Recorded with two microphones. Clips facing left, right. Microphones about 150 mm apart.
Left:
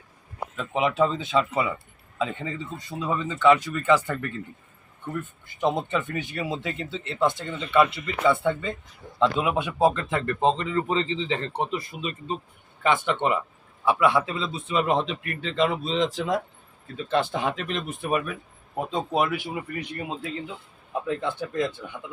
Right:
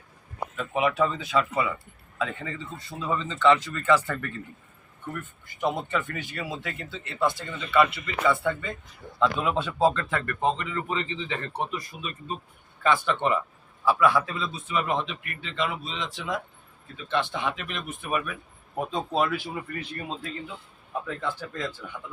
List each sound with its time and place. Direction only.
0.7 s speech: 20° left (ahead or behind)
9.4 s a man's voice: 15° left (ahead or behind); by 18.3 s 35° left (ahead or behind)
18.8 s speech: 20° left (ahead or behind)